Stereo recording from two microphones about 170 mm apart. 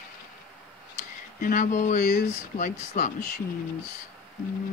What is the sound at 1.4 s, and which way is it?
Speech, 50° left (ahead or behind).